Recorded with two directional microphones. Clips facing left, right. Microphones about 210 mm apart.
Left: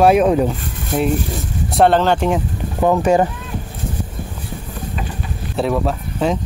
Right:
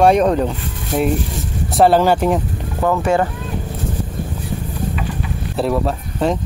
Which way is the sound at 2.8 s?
20° left (ahead or behind).